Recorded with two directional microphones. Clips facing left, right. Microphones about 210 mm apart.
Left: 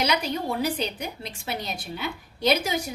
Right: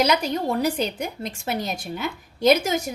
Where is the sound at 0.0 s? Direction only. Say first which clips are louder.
Right 4 dB; 45° right (ahead or behind).